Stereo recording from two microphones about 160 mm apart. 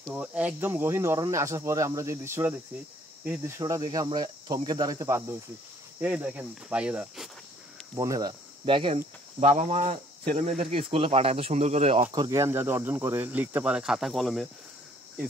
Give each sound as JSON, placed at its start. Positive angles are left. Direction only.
{"t": 0.1, "sound": "speech", "side_deg": -10}
{"t": 5.9, "sound": "speech", "side_deg": -10}
{"t": 7.9, "sound": "speech", "side_deg": -20}
{"t": 9.4, "sound": "speech", "side_deg": -45}
{"t": 12.1, "sound": "speech", "side_deg": -25}